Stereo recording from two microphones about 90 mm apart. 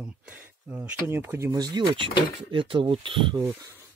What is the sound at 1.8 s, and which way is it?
Speech, 70° right (ahead or behind).